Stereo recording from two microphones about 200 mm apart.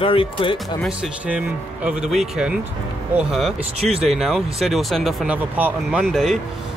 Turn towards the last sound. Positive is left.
turn(degrees=0)  # may be behind; listen again after turning